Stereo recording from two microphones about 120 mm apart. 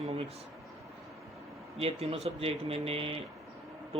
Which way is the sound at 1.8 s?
55° right (ahead or behind).